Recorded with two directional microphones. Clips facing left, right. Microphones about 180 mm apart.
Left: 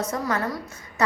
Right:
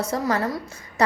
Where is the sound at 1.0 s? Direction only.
35° right (ahead or behind).